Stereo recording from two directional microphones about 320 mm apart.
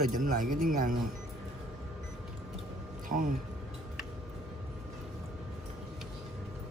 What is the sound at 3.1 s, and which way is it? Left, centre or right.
Speech, right.